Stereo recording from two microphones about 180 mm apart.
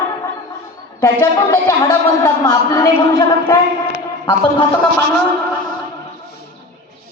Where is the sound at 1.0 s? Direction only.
15° left (ahead or behind).